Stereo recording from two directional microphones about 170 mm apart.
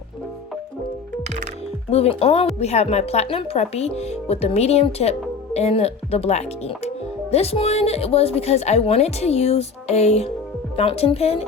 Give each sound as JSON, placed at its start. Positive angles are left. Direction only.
{"t": 1.9, "sound": "speech", "side_deg": 35}